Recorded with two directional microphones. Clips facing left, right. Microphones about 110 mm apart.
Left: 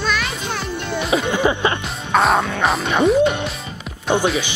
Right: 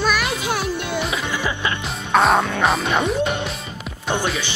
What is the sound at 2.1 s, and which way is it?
Speech, centre (ahead or behind).